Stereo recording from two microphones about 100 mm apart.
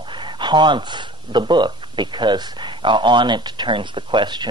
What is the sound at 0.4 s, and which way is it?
Speech, 50° right (ahead or behind).